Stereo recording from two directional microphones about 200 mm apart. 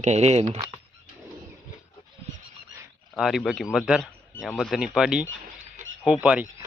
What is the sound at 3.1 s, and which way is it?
Speech, centre (ahead or behind).